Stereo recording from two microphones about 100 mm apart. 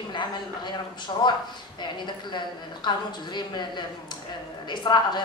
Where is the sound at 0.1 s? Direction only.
50° left (ahead or behind).